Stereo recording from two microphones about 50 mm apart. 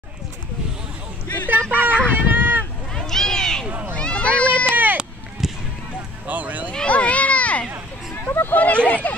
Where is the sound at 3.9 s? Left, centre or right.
Left.